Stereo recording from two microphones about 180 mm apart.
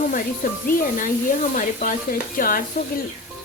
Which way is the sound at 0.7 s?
50° left (ahead or behind).